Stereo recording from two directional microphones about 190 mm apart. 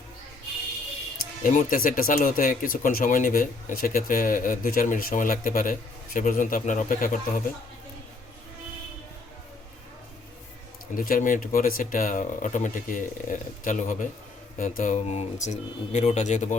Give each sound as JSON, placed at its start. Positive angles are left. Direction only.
{"t": 1.5, "sound": "speech", "side_deg": 45}
{"t": 10.9, "sound": "speech", "side_deg": 45}